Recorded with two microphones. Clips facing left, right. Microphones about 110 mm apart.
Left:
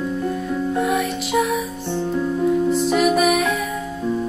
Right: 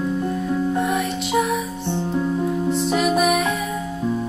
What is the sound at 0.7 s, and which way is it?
Music, centre (ahead or behind).